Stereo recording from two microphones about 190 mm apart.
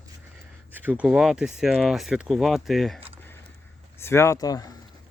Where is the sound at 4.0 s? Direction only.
15° left (ahead or behind).